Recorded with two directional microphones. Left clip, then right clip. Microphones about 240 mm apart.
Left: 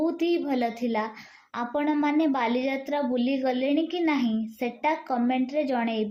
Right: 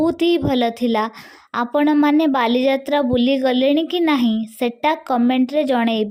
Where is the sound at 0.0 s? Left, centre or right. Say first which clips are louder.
Right 8 dB; right.